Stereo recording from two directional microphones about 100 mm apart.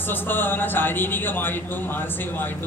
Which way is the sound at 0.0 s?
20° left (ahead or behind).